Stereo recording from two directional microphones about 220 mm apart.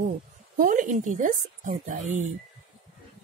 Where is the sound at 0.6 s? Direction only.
35° right (ahead or behind).